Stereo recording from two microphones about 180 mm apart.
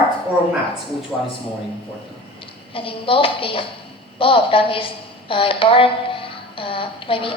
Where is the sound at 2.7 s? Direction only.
30° left (ahead or behind).